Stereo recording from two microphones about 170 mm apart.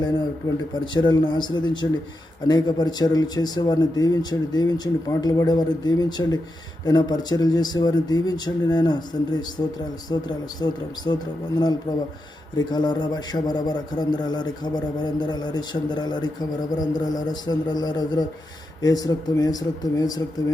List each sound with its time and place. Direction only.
0.9 s a man's voice: 25° left (ahead or behind)